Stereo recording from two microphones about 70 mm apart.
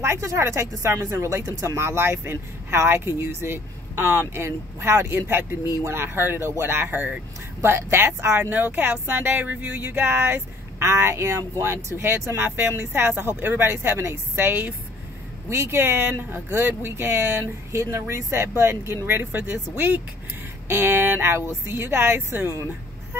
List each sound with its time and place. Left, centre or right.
0.0 s speech: right
7.6 s speech: right